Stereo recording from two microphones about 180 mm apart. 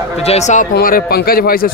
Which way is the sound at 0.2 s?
35° left (ahead or behind).